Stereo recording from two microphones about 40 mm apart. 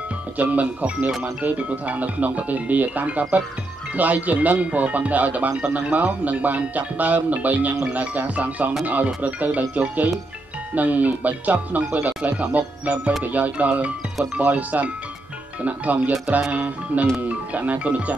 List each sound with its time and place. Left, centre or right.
0.4 s speech: right